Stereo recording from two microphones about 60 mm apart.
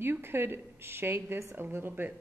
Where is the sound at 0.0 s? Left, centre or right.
Right.